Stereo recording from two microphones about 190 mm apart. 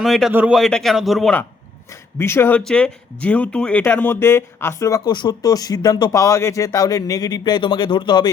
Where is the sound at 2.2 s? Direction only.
10° left (ahead or behind).